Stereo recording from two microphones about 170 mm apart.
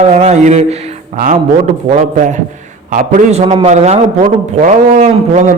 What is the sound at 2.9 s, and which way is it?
A man's voice, 45° right (ahead or behind).